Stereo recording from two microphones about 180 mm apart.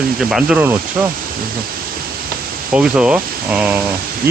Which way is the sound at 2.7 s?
5° right (ahead or behind).